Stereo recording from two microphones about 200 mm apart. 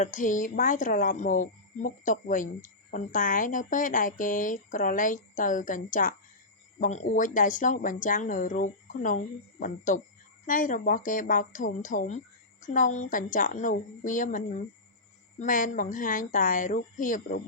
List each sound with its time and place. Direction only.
0.0 s speech: 40° left (ahead or behind)